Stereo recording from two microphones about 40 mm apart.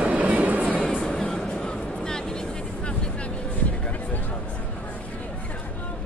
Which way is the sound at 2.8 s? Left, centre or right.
Left.